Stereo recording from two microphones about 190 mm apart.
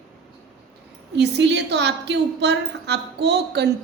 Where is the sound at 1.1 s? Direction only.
65° right (ahead or behind).